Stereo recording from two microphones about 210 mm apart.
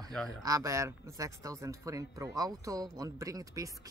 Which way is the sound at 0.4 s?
15° right (ahead or behind).